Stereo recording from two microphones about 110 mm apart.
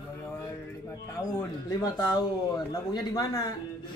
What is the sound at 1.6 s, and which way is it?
Speech, 40° left (ahead or behind).